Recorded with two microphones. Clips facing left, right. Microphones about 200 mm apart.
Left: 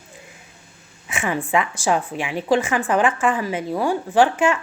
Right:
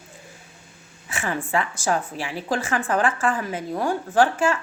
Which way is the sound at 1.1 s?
15° left (ahead or behind).